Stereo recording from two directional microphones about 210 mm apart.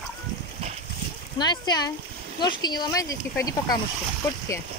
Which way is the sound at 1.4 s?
20° left (ahead or behind).